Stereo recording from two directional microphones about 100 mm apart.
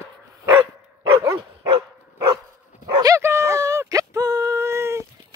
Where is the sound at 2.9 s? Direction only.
35° right (ahead or behind).